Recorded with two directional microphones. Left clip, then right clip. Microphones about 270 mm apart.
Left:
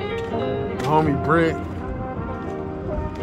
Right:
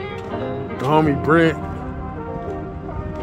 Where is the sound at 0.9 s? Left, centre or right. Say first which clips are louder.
Right 3 dB; right.